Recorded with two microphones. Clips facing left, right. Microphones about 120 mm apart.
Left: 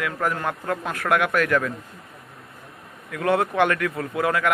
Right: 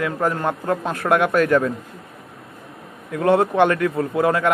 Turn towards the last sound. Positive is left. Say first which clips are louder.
# right 5 dB
turn(degrees=-30)  # may be behind; listen again after turning